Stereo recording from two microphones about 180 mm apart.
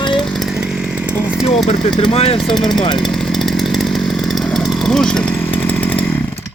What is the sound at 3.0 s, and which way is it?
Chainsaw, centre (ahead or behind).